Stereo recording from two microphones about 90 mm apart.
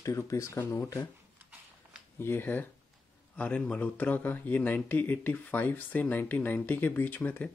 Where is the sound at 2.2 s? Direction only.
25° left (ahead or behind).